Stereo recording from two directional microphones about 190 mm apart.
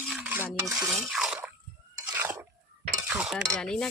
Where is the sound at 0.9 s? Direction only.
Centre (ahead or behind).